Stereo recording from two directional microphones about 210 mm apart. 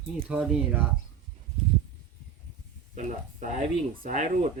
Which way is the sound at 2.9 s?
35° right (ahead or behind).